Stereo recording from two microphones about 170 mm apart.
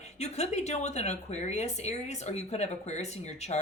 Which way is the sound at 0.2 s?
40° left (ahead or behind).